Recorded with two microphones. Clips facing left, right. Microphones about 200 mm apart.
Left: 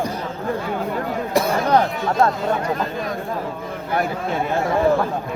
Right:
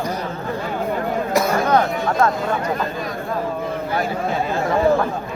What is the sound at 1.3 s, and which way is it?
Chatter, 30° left (ahead or behind).